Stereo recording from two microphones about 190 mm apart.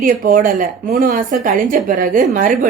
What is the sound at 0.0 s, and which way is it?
A woman's voice, 45° right (ahead or behind).